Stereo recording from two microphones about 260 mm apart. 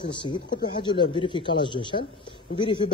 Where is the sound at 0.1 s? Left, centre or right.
Centre.